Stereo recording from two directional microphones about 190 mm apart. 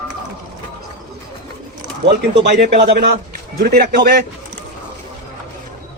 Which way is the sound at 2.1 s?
65° right (ahead or behind).